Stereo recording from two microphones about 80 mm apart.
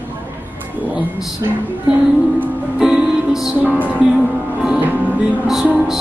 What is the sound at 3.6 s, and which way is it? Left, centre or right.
Music, centre.